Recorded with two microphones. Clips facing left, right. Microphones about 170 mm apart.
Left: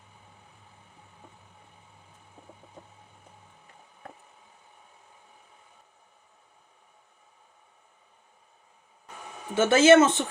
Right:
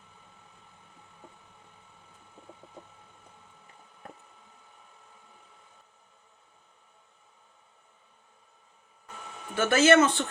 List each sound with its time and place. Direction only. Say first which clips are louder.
9.6 s speech: left 3 dB; 25° left (ahead or behind)